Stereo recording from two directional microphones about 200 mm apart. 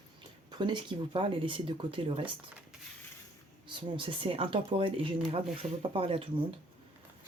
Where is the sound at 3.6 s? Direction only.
25° right (ahead or behind).